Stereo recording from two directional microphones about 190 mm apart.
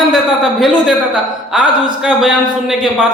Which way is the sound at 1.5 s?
5° right (ahead or behind).